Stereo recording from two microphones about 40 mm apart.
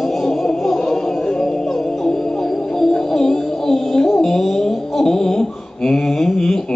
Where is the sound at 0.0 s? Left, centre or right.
Centre.